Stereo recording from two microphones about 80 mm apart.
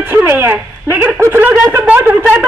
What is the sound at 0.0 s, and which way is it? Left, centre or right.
Speech, right.